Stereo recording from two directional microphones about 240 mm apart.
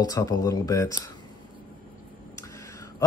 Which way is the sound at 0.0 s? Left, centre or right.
Centre.